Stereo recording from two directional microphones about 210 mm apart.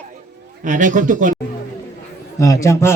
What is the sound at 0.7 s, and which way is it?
Speech, 35° right (ahead or behind).